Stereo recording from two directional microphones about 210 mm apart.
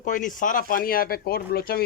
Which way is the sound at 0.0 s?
40° left (ahead or behind).